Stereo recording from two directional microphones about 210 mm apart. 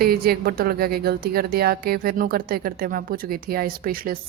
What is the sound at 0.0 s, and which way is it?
A woman's voice, 45° right (ahead or behind).